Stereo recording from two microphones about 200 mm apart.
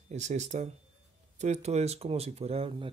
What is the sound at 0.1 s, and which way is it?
Speech, 35° right (ahead or behind).